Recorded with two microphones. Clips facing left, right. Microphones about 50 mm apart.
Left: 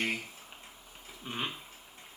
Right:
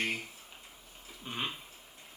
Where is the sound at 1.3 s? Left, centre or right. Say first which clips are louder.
Left 1 dB; centre.